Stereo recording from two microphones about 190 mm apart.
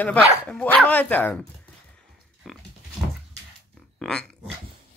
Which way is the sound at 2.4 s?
Centre (ahead or behind).